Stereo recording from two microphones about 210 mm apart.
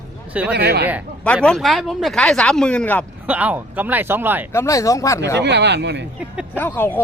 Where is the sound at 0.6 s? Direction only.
50° right (ahead or behind).